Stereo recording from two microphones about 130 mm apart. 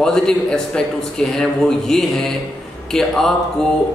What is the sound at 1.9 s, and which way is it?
Speech, 5° left (ahead or behind).